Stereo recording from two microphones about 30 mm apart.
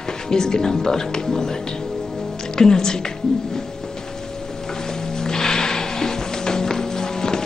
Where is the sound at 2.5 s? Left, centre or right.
Left.